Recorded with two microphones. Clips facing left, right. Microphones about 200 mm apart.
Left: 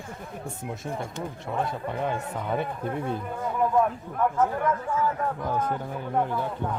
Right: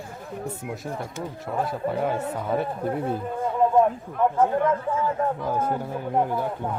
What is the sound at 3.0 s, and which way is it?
Speech, 30° right (ahead or behind).